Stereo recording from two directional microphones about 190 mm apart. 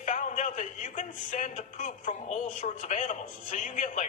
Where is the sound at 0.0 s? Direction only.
40° left (ahead or behind).